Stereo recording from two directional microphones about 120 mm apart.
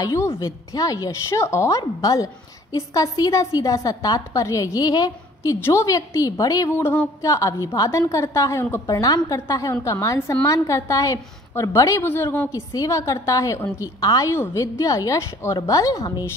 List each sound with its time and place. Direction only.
0.0 s a woman's voice: 25° left (ahead or behind)
6.7 s a woman's voice: 20° left (ahead or behind)